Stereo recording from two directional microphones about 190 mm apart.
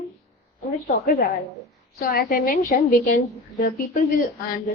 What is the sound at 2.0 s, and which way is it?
A woman's voice, 55° left (ahead or behind).